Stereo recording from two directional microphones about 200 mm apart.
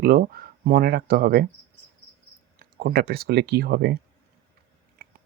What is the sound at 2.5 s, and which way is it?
Speech, 50° right (ahead or behind).